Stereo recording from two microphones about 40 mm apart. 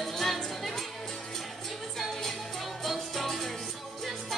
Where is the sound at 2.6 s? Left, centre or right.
Centre.